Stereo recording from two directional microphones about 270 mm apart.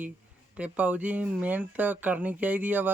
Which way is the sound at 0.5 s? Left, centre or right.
Centre.